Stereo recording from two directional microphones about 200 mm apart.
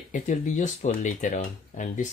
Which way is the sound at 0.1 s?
40° left (ahead or behind).